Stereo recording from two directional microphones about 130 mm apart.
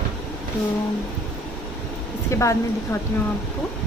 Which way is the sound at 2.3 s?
25° left (ahead or behind).